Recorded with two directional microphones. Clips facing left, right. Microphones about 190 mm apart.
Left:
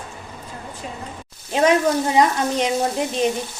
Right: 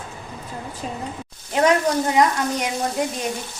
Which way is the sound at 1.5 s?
20° left (ahead or behind).